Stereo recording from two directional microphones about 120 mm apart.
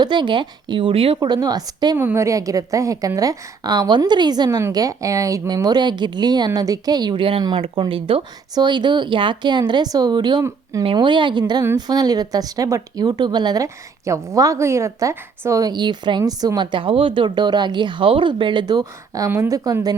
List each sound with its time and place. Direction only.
0.0 s a woman's voice: 40° right (ahead or behind)
2.0 s a woman's voice: 20° right (ahead or behind)
10.9 s a woman's voice: 40° right (ahead or behind)